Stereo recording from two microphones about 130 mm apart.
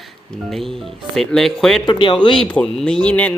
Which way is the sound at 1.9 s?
40° left (ahead or behind).